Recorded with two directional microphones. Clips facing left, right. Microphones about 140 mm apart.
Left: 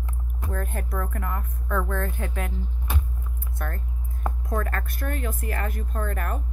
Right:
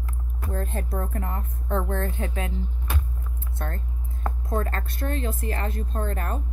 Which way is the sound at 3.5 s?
25° right (ahead or behind).